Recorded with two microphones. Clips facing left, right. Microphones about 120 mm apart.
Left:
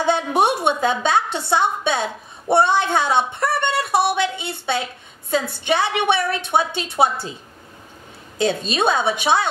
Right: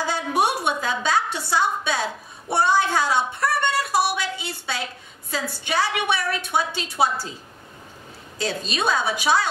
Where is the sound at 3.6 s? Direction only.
25° left (ahead or behind).